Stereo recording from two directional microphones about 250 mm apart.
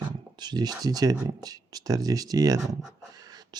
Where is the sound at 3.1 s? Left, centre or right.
Centre.